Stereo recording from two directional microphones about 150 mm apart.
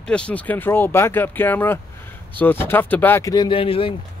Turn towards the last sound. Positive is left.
turn(degrees=35)  # may be behind; listen again after turning